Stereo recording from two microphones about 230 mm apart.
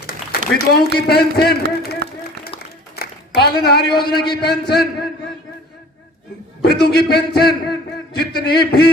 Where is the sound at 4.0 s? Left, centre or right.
Left.